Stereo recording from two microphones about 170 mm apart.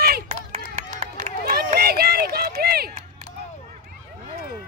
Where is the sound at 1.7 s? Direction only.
65° right (ahead or behind).